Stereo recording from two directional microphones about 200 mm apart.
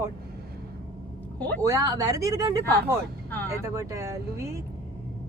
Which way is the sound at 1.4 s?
10° left (ahead or behind).